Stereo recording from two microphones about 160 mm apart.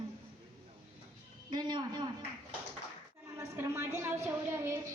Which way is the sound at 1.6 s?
25° right (ahead or behind).